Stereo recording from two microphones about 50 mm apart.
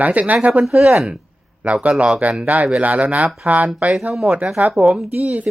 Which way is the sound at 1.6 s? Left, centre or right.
Right.